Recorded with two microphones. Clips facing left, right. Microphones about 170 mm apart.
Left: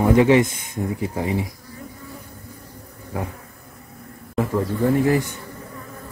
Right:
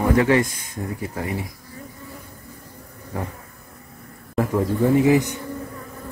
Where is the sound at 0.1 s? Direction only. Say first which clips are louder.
Left 4 dB; 20° left (ahead or behind).